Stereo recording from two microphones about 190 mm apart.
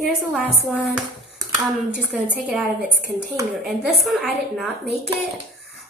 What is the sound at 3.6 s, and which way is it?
A woman's voice, centre (ahead or behind).